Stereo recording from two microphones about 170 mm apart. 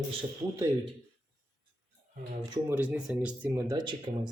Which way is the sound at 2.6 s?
10° right (ahead or behind).